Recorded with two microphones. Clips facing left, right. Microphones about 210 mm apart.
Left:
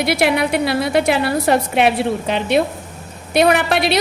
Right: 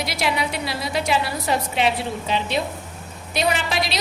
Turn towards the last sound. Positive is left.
turn(degrees=60)  # may be behind; listen again after turning